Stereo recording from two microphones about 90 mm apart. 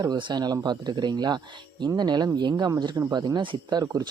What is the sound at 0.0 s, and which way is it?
Speech, 55° right (ahead or behind).